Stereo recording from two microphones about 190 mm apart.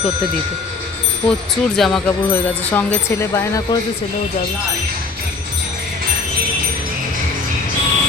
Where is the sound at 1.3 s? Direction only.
Centre (ahead or behind).